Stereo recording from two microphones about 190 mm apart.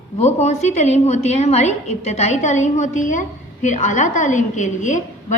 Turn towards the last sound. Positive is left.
turn(degrees=40)  # may be behind; listen again after turning